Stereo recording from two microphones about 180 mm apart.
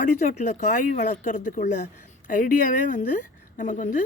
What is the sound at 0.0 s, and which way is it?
Speech, 45° left (ahead or behind).